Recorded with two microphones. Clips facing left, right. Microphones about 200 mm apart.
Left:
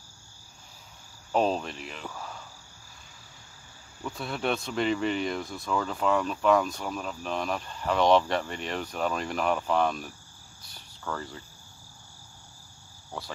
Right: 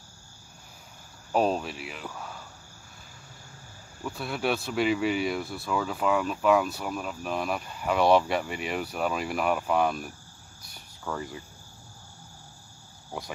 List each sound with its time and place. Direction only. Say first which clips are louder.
1.3 s speech: right 1 dB; 5° right (ahead or behind)
4.0 s speech: right 1 dB; 5° right (ahead or behind)
10.6 s cricket: right 1 dB; 10° right (ahead or behind)
13.1 s speech: right 2 dB; 15° right (ahead or behind)